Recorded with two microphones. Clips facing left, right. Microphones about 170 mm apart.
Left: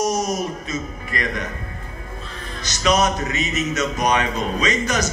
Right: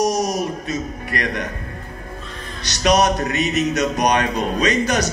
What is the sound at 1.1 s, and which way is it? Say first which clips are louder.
Speech: right 2 dB; 65° right (ahead or behind).